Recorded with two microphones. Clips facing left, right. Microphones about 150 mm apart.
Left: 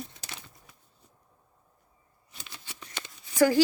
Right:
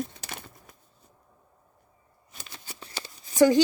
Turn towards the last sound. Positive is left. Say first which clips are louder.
# right 3 dB
turn(degrees=-20)  # may be behind; listen again after turning